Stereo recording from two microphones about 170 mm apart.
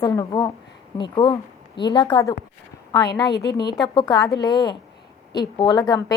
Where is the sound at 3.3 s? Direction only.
75° left (ahead or behind).